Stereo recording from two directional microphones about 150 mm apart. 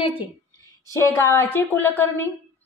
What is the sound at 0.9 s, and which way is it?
Speech, 20° left (ahead or behind).